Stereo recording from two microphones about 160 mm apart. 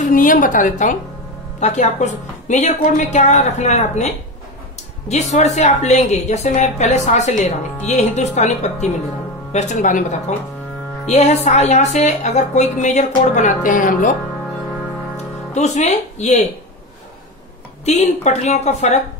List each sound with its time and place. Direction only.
0.0 s a woman's voice: 55° left (ahead or behind)
15.5 s speech: 45° left (ahead or behind)
17.8 s a woman's voice: 45° left (ahead or behind)